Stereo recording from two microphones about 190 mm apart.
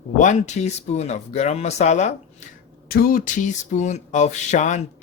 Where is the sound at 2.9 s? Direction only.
50° left (ahead or behind).